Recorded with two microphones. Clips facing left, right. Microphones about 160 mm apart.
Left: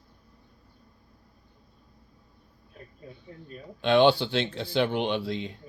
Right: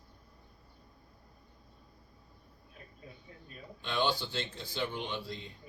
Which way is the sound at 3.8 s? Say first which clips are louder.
Left 12 dB; 75° left (ahead or behind).